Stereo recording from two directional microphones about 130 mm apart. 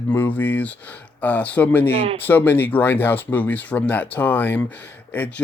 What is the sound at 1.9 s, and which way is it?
Speech, 45° right (ahead or behind).